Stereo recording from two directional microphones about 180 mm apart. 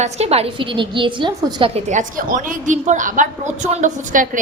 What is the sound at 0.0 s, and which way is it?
A woman's voice, 35° right (ahead or behind).